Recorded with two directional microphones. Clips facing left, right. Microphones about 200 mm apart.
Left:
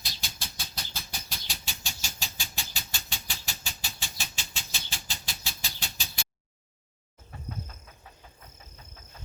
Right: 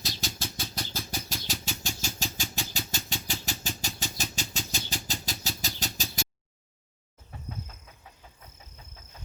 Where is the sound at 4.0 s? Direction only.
40° right (ahead or behind).